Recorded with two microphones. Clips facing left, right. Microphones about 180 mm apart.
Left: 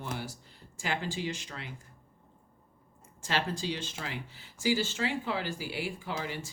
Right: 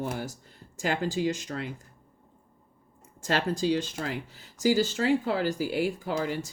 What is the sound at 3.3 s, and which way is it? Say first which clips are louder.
Speech: right 7 dB; 45° right (ahead or behind).